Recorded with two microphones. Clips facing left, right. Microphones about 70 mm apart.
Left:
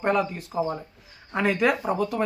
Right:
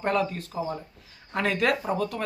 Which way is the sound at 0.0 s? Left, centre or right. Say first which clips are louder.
Left 2 dB; centre.